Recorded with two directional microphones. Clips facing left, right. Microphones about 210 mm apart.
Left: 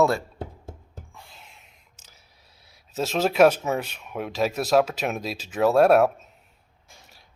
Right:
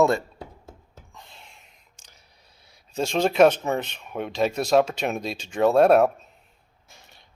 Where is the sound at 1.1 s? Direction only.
5° left (ahead or behind).